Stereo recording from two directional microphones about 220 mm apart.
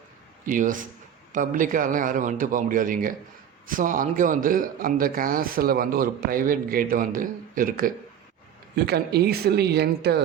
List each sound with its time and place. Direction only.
0.4 s a man's voice: 35° right (ahead or behind)